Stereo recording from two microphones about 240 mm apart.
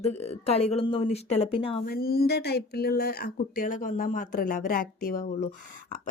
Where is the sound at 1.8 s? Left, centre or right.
Left.